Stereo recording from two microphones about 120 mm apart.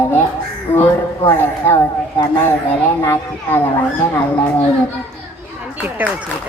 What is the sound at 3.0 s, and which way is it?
Speech, 25° left (ahead or behind).